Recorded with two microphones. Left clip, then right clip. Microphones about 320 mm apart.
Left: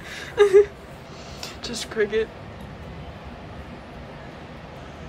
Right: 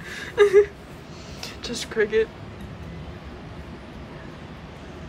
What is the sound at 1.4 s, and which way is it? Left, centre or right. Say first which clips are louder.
Music: even; centre.